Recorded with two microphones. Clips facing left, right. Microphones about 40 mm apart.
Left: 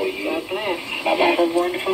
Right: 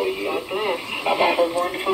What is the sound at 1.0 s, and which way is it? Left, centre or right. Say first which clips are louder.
Radio: left 1 dB; centre.